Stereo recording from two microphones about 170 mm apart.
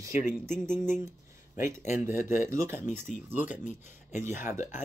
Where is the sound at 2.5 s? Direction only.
15° right (ahead or behind).